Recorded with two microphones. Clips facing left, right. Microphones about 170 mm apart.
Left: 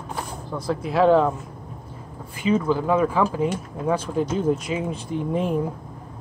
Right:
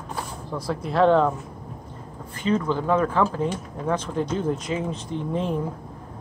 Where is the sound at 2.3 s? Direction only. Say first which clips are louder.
Left 2 dB; 10° left (ahead or behind).